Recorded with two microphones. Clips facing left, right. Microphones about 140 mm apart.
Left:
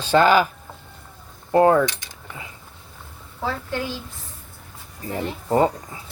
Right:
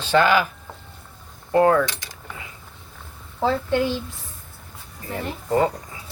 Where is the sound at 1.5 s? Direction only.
25° left (ahead or behind).